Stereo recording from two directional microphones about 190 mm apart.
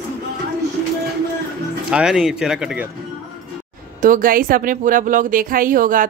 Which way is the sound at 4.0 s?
45° right (ahead or behind).